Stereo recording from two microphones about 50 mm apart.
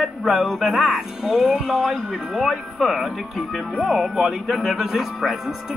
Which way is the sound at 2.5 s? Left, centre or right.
Centre.